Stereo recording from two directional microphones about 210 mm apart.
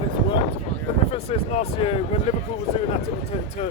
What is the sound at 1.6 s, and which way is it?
Speech, 30° left (ahead or behind).